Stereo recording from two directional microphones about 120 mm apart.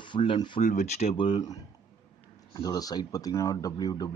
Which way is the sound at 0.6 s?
75° left (ahead or behind).